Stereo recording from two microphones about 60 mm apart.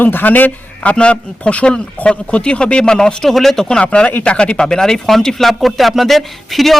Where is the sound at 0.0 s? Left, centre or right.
Left.